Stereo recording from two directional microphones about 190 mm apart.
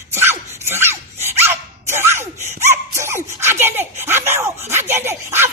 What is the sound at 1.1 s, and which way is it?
Dog, 35° right (ahead or behind).